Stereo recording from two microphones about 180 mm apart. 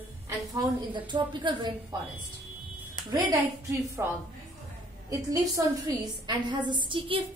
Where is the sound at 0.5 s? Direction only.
25° right (ahead or behind).